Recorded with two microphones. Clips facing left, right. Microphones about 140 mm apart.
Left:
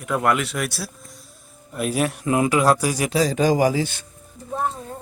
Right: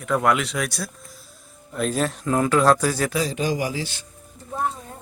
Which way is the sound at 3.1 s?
40° left (ahead or behind).